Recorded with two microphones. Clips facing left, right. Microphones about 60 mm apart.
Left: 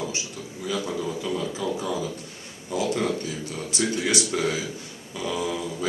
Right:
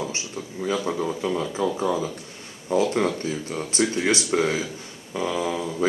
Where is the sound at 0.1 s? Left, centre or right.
Right.